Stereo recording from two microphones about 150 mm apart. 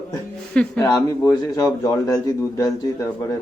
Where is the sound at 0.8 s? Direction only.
20° left (ahead or behind).